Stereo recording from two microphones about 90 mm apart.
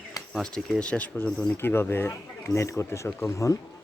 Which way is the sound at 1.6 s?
25° left (ahead or behind).